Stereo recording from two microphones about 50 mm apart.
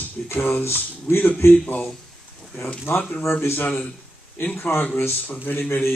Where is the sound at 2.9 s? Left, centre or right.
Left.